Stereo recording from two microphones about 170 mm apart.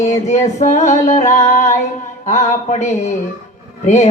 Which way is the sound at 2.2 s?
45° left (ahead or behind).